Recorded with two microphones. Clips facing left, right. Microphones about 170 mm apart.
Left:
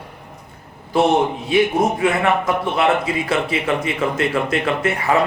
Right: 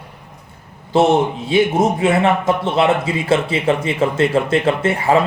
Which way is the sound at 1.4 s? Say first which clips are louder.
Right 3 dB; 25° right (ahead or behind).